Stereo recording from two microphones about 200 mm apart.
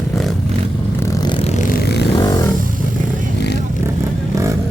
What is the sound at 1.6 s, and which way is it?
Vehicle, 50° left (ahead or behind).